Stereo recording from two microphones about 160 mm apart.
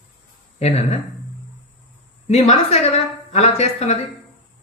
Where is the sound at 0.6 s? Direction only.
45° left (ahead or behind).